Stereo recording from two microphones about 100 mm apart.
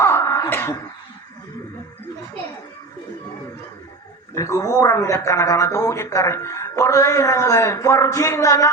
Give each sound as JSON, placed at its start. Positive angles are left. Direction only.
{"t": 0.0, "sound": "wail", "side_deg": 25}
{"t": 4.4, "sound": "speech", "side_deg": 30}